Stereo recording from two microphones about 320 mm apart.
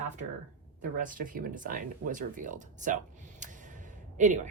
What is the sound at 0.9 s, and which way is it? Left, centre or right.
Speech, right.